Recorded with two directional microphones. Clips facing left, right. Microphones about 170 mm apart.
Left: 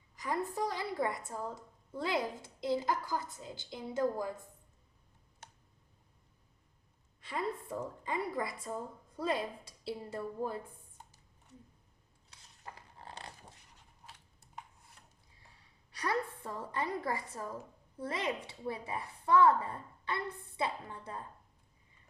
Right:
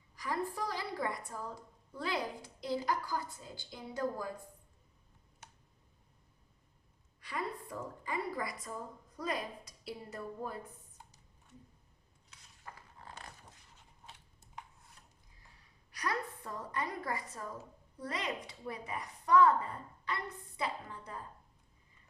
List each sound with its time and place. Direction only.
0.2 s a woman's voice: 20° left (ahead or behind)
7.2 s a woman's voice: 25° left (ahead or behind)
12.7 s dog: 35° left (ahead or behind)
15.9 s a woman's voice: 25° left (ahead or behind)